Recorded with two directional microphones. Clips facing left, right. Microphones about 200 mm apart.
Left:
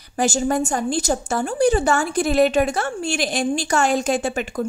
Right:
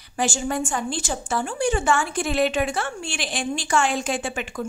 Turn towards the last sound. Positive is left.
turn(degrees=40)  # may be behind; listen again after turning